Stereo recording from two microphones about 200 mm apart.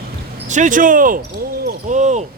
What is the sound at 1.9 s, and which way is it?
Basketball bounce, 35° right (ahead or behind).